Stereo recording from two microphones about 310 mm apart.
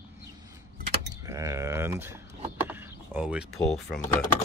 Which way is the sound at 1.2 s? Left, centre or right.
Centre.